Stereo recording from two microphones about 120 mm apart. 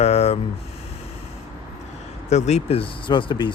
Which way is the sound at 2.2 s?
70° left (ahead or behind).